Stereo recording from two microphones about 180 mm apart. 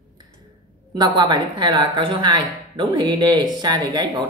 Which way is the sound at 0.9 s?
25° right (ahead or behind).